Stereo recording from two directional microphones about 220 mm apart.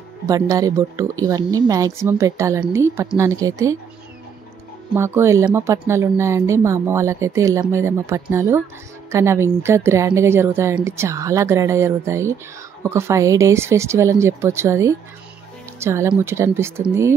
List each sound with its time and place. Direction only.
0.3 s speech: 15° right (ahead or behind)
4.9 s speech: 10° right (ahead or behind)